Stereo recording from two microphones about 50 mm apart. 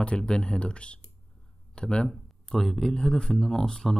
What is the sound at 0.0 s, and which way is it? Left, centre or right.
Speech, centre.